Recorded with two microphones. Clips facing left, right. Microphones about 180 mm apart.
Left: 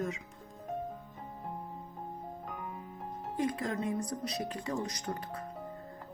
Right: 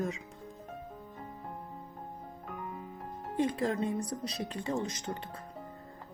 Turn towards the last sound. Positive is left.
turn(degrees=-25)  # may be behind; listen again after turning